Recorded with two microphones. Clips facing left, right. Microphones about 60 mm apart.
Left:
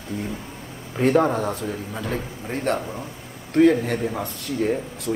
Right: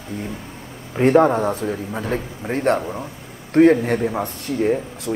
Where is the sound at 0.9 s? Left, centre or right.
Right.